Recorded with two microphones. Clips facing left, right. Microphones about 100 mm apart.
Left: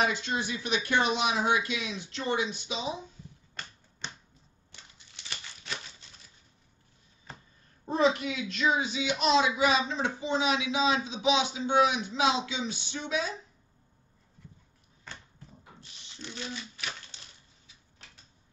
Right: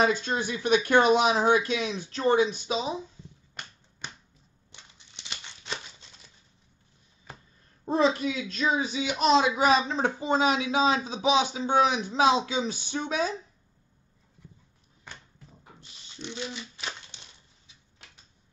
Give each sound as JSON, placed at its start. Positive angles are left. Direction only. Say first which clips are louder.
{"t": 0.0, "sound": "speech", "louder": "right 4 dB", "side_deg": -45}
{"t": 4.7, "sound": "a sound", "louder": "right 1 dB", "side_deg": -20}
{"t": 7.9, "sound": "a child's voice", "louder": "right 2 dB", "side_deg": -35}
{"t": 15.8, "sound": "typewriter", "louder": "right 5 dB", "side_deg": -20}